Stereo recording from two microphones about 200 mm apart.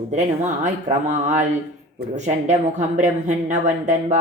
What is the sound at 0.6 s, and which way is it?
Speech, 40° right (ahead or behind).